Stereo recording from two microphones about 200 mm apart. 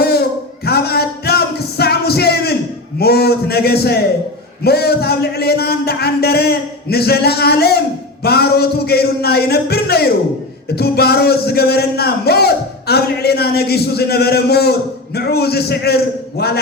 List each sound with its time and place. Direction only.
0.0 s music: 55° left (ahead or behind)
3.0 s a man's voice: 50° left (ahead or behind)